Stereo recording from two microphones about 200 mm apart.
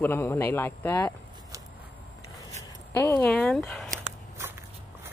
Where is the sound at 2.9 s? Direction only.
10° left (ahead or behind).